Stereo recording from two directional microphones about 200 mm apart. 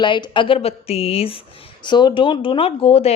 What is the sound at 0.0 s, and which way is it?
Speech, 25° left (ahead or behind).